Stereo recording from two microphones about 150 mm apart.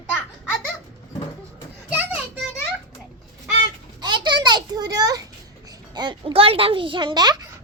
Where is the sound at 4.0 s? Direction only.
30° right (ahead or behind).